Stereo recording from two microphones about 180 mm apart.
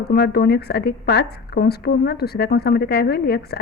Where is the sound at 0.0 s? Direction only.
65° left (ahead or behind).